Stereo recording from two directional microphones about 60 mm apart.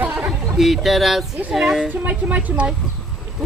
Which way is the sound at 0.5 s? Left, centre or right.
Centre.